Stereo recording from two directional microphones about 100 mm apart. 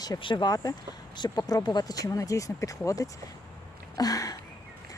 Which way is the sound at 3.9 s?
40° left (ahead or behind).